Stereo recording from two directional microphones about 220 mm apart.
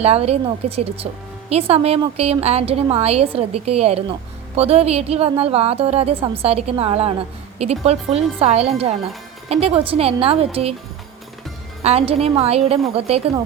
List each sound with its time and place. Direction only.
0.0 s a woman's voice: 25° right (ahead or behind)
11.8 s a woman's voice: 25° right (ahead or behind)